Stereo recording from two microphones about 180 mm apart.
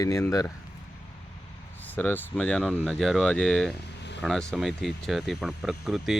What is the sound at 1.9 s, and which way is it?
Speech, 10° left (ahead or behind).